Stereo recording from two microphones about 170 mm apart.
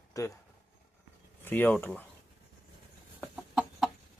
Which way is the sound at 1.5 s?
10° left (ahead or behind).